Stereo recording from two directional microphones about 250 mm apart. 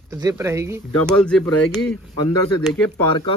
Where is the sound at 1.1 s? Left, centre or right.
Centre.